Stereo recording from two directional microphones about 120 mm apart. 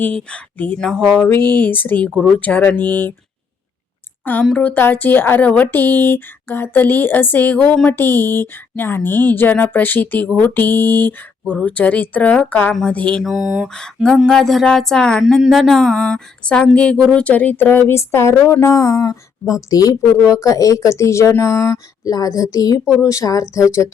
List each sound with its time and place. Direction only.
0.0 s speech: 10° left (ahead or behind)
1.5 s speech: 15° left (ahead or behind)
4.5 s speech: 15° left (ahead or behind)
13.2 s a sound: 5° right (ahead or behind)
13.7 s a sound: 5° left (ahead or behind)
14.3 s speech: 5° left (ahead or behind); by 23.9 s 25° left (ahead or behind)